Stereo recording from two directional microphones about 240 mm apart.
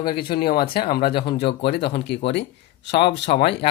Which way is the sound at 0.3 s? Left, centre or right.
Left.